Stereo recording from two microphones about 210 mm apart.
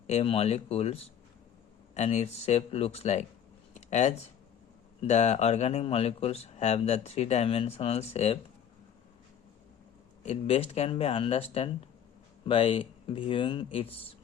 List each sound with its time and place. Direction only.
0.1 s speech: 30° left (ahead or behind)
3.8 s a sound: 35° left (ahead or behind)
4.9 s speech: 30° left (ahead or behind)
10.2 s speech: 30° left (ahead or behind)